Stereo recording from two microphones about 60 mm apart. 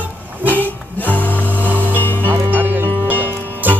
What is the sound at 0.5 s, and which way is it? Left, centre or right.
Music, left.